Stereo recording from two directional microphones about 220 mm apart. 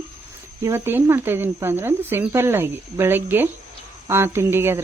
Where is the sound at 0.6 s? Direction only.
10° right (ahead or behind).